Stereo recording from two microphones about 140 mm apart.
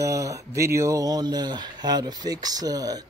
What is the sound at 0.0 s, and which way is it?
Speech, 20° right (ahead or behind).